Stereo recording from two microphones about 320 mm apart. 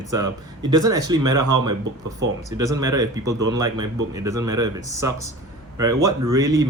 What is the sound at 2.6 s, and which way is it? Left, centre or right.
Speech, centre.